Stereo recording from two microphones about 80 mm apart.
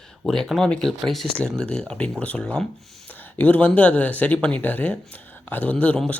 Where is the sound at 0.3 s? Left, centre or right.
Centre.